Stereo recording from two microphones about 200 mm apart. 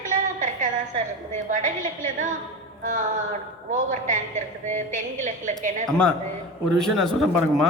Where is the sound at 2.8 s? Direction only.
40° right (ahead or behind).